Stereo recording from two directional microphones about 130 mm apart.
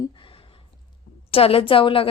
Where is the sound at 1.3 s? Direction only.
45° left (ahead or behind).